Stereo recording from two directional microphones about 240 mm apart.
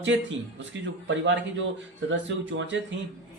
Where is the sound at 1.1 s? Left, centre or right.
Right.